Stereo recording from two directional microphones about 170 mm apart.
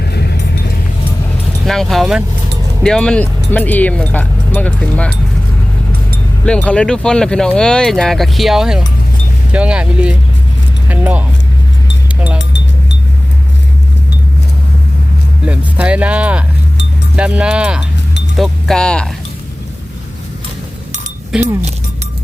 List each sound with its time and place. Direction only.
0.0 s vehicle: 70° left (ahead or behind)
1.6 s speech: centre (ahead or behind)
6.4 s speech: 5° left (ahead or behind)
15.4 s speech: 5° right (ahead or behind)
21.3 s speech: 5° right (ahead or behind)